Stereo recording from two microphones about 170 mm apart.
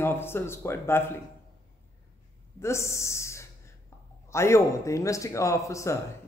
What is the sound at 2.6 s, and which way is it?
A man's voice, 15° left (ahead or behind).